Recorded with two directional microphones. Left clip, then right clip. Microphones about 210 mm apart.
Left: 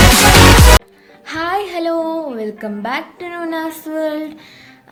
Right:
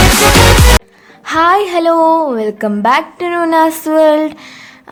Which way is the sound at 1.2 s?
40° right (ahead or behind).